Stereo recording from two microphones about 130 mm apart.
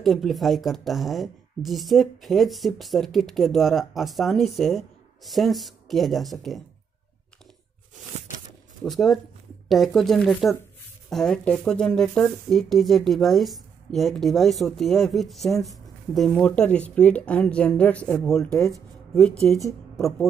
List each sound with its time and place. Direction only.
0.0 s speech: centre (ahead or behind)
8.8 s speech: centre (ahead or behind)